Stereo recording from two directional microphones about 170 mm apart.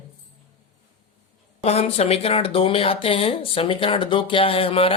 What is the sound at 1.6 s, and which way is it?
Speech, 40° left (ahead or behind).